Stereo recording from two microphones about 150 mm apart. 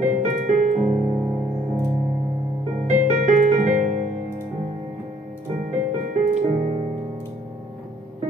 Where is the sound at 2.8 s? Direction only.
50° right (ahead or behind).